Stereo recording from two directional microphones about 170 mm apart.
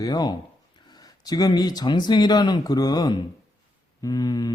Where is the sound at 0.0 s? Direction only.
20° left (ahead or behind).